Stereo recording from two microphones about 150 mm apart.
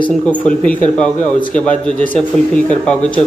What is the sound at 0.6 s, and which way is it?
A man's voice, 10° left (ahead or behind).